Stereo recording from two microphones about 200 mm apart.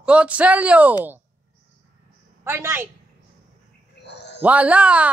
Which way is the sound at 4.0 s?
60° left (ahead or behind).